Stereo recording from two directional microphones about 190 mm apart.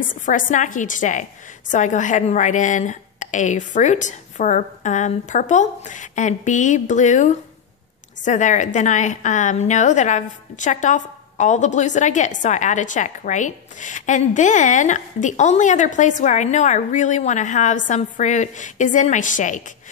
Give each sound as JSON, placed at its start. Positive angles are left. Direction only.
{"t": 0.0, "sound": "a woman's voice", "side_deg": 45}